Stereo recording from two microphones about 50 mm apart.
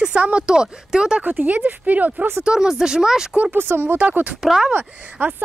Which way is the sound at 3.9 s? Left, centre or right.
Right.